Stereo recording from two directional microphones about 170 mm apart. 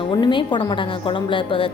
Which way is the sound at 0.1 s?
25° left (ahead or behind).